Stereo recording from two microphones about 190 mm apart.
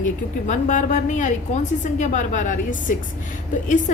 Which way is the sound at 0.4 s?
40° left (ahead or behind).